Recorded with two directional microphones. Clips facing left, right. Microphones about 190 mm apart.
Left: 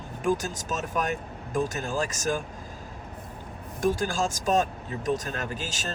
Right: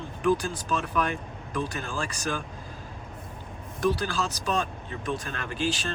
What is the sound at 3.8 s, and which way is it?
Speech, 45° left (ahead or behind).